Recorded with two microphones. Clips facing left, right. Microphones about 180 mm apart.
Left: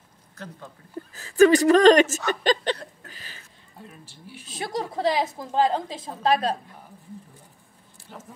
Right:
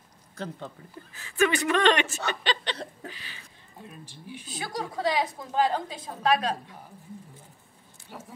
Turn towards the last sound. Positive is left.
turn(degrees=25)  # may be behind; listen again after turning